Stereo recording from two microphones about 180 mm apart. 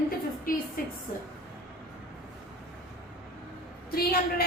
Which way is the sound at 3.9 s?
60° left (ahead or behind).